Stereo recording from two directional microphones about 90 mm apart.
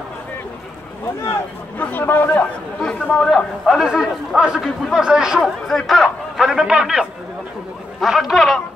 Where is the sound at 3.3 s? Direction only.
Centre (ahead or behind).